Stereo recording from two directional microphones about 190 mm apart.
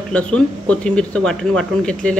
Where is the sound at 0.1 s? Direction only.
5° left (ahead or behind).